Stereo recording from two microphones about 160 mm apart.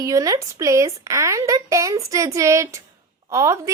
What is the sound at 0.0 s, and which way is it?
A woman's voice, 20° right (ahead or behind).